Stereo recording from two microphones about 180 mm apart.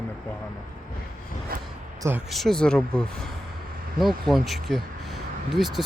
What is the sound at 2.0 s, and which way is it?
Speech, 10° right (ahead or behind).